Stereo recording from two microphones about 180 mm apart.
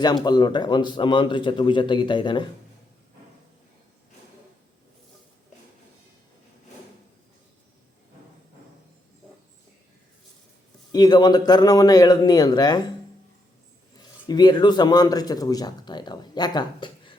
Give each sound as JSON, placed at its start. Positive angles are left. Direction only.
{"t": 0.0, "sound": "speech", "side_deg": 25}
{"t": 10.9, "sound": "speech", "side_deg": 25}
{"t": 14.3, "sound": "speech", "side_deg": 25}